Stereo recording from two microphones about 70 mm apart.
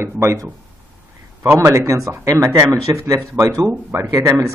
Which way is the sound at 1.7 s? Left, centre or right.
Right.